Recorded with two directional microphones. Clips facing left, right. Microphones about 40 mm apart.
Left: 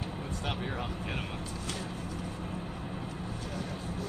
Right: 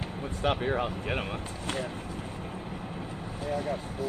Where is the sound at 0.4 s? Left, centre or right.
Right.